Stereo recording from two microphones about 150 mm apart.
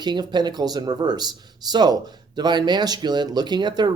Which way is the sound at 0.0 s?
30° right (ahead or behind).